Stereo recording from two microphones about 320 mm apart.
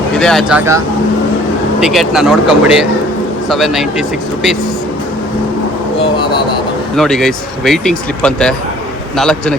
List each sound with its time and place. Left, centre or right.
0.2 s speech: centre
1.8 s speech: centre
6.9 s speech: centre